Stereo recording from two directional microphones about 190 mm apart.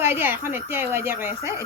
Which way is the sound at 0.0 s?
10° right (ahead or behind).